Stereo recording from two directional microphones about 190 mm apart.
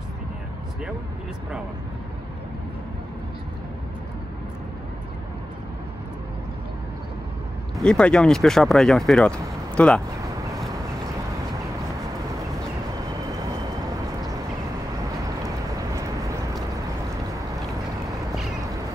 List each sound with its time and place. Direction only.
7.7 s speech: 5° left (ahead or behind)
15.4 s vehicle: 15° right (ahead or behind)